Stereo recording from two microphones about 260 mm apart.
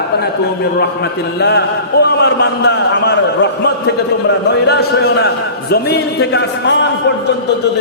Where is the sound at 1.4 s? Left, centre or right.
Left.